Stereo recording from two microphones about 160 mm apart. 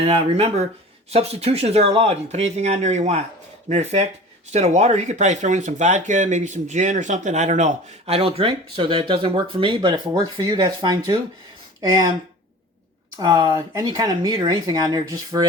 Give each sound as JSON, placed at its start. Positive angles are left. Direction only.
{"t": 0.0, "sound": "speech", "side_deg": -35}
{"t": 13.1, "sound": "speech", "side_deg": -25}